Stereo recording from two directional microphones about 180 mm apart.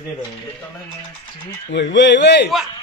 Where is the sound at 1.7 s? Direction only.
85° left.